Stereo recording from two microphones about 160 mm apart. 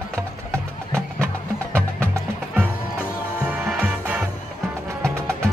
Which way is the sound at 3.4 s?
10° right (ahead or behind).